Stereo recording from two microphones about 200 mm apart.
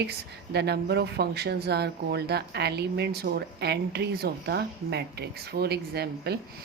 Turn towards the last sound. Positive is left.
turn(degrees=-55)  # may be behind; listen again after turning